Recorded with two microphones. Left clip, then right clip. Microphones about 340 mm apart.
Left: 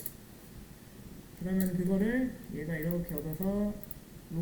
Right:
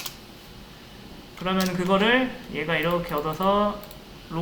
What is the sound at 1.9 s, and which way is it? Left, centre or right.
Speech, right.